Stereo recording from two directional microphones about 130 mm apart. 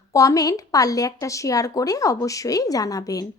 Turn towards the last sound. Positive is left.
turn(degrees=30)  # may be behind; listen again after turning